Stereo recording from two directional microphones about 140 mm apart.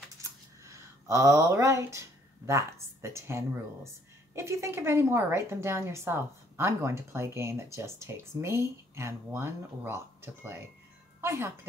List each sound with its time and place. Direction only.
0.2 s a woman's voice: 20° right (ahead or behind)